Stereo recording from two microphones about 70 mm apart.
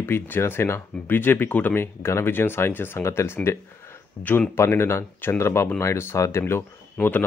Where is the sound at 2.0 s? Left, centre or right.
Left.